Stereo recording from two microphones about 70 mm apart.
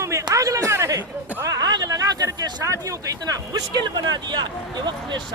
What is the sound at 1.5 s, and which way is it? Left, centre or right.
A man's voice, right.